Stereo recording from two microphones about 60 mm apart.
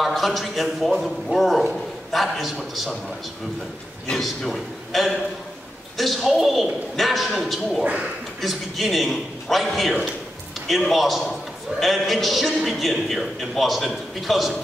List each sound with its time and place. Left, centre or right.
0.0 s a man's voice: centre
4.2 s a man's voice: centre
7.8 s a man's voice: right
8.4 s a man's voice: centre